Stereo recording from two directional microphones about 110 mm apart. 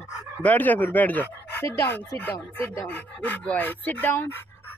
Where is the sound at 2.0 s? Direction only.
15° left (ahead or behind).